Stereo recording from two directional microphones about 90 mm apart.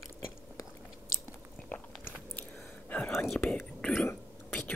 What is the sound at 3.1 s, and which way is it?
Whispering, centre (ahead or behind).